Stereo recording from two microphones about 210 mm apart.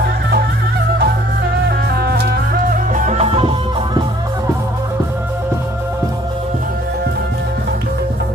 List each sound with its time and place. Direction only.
2.0 s music: 50° right (ahead or behind); by 3.5 s 30° right (ahead or behind)